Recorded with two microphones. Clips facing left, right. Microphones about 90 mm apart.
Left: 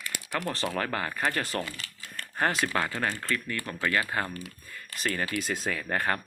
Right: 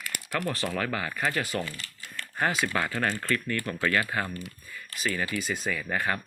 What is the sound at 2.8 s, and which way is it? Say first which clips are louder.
Speech: right 2 dB; 20° left (ahead or behind).